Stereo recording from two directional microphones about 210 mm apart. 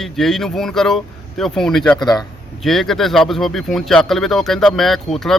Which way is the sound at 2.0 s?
20° left (ahead or behind).